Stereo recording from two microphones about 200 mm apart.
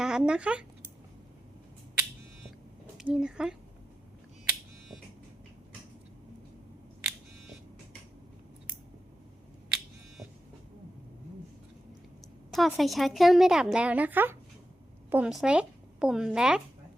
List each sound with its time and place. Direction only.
0.0 s speech: 5° right (ahead or behind)
3.0 s a woman's voice: 5° right (ahead or behind)
12.5 s a woman's voice: centre (ahead or behind)